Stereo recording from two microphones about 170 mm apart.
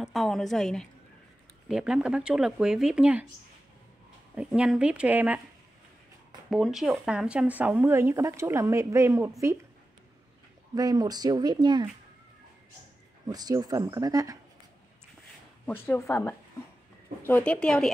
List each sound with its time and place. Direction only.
0.0 s speech: centre (ahead or behind)
4.4 s speech: 5° right (ahead or behind)
6.5 s speech: centre (ahead or behind); by 9.3 s 15° right (ahead or behind)
10.7 s speech: 25° right (ahead or behind)
13.3 s speech: 20° right (ahead or behind)
15.6 s speech: 10° left (ahead or behind)